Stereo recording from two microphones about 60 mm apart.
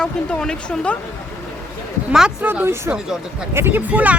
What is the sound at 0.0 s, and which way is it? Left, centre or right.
Speech, centre.